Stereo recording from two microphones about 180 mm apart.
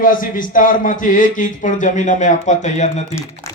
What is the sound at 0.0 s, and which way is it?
A man's voice, 50° left (ahead or behind).